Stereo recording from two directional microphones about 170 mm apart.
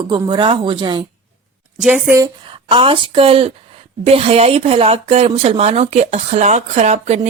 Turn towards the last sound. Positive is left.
turn(degrees=-40)  # may be behind; listen again after turning